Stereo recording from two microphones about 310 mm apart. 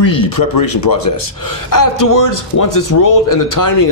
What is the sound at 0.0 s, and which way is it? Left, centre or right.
Speech, left.